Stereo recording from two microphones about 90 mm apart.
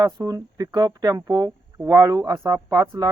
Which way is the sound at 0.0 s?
45° right (ahead or behind).